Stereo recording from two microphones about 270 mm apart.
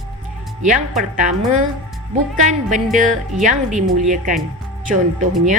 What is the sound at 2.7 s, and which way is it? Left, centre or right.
Speech, right.